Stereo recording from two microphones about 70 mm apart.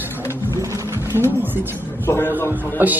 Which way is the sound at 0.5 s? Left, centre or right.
Right.